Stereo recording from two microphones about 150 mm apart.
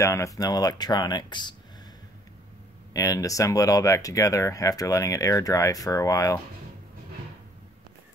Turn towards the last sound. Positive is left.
turn(degrees=20)  # may be behind; listen again after turning